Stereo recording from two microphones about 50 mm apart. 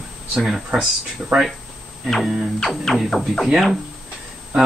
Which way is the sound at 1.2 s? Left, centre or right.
Right.